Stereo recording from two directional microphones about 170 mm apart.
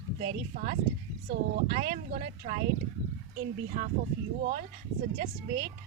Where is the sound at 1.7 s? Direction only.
55° right (ahead or behind).